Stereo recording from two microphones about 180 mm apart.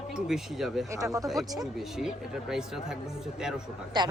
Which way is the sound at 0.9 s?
20° right (ahead or behind).